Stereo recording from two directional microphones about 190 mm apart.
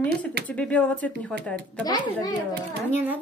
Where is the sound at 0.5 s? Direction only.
5° left (ahead or behind).